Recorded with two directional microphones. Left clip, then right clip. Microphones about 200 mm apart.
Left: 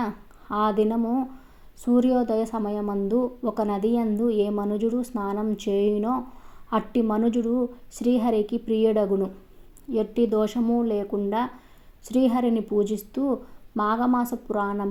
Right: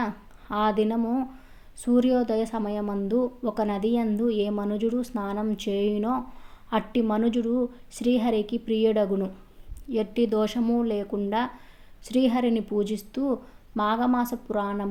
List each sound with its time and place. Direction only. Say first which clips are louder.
0.0 s a woman's voice: even; 10° right (ahead or behind)